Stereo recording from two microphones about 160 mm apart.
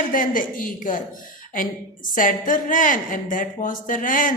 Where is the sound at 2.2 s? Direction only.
55° left (ahead or behind).